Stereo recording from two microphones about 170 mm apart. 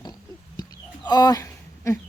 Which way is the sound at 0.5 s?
25° left (ahead or behind).